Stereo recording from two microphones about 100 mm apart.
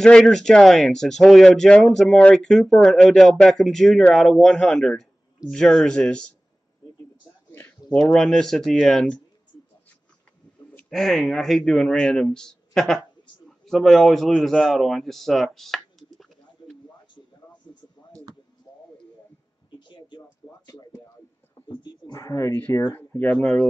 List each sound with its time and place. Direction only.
0.0 s speech: 5° left (ahead or behind)
7.9 s speech: 5° left (ahead or behind)
10.9 s speech: centre (ahead or behind)
20.4 s a sound: 45° left (ahead or behind)
21.6 s dog: 50° left (ahead or behind)
22.2 s speech: 30° left (ahead or behind)
22.6 s speech: 15° left (ahead or behind)
23.3 s speech: 5° left (ahead or behind)